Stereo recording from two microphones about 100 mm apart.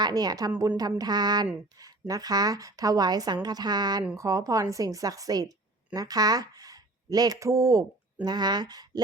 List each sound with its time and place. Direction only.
0.0 s speech: 40° right (ahead or behind)
0.8 s a sound: 40° right (ahead or behind)
1.8 s speech: 35° right (ahead or behind)